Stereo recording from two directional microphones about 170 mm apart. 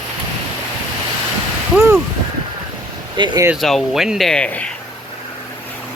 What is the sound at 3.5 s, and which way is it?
Speech, centre (ahead or behind).